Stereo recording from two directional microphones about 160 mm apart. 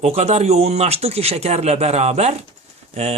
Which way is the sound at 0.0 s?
40° right (ahead or behind).